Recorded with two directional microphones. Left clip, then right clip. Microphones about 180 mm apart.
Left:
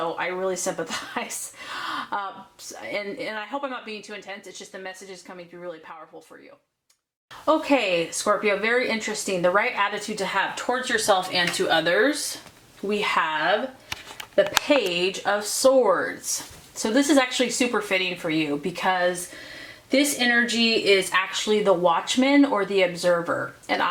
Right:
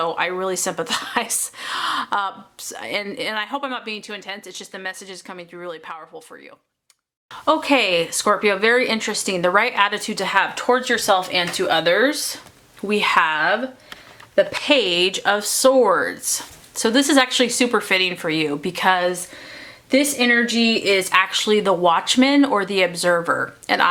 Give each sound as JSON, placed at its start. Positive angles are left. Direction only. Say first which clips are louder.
{"t": 0.0, "sound": "speech", "louder": "right 4 dB", "side_deg": -30}
{"t": 7.4, "sound": "speech", "louder": "right 4 dB", "side_deg": -30}
{"t": 20.2, "sound": "speech", "louder": "right 3 dB", "side_deg": -30}